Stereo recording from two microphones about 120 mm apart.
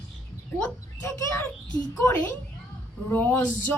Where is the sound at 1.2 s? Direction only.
25° left (ahead or behind).